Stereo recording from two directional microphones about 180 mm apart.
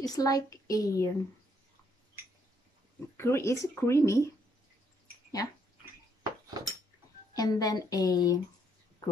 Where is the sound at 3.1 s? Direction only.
15° left (ahead or behind).